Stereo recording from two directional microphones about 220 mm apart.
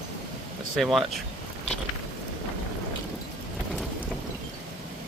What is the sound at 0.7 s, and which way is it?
Speech, centre (ahead or behind).